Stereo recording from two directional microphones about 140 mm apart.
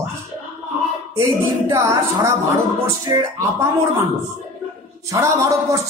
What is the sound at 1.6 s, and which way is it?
Music, 20° right (ahead or behind).